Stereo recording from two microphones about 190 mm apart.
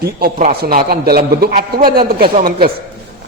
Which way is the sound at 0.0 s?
55° right (ahead or behind).